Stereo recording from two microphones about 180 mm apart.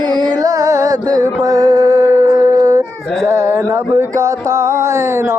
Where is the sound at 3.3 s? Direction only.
15° right (ahead or behind).